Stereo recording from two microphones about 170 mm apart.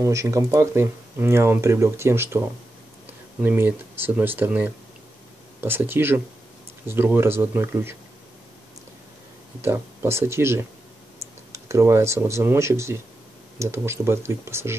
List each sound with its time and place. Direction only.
0.0 s speech: 20° right (ahead or behind)
9.6 s speech: 15° right (ahead or behind)